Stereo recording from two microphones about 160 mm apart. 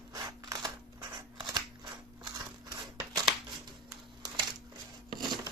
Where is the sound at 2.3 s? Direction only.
20° right (ahead or behind).